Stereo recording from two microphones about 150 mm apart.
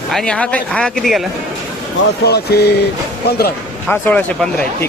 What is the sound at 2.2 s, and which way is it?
Speech, 90° left.